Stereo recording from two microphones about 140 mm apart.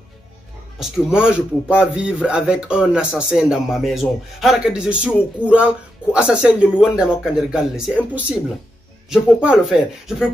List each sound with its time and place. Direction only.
0.7 s speech: 5° right (ahead or behind)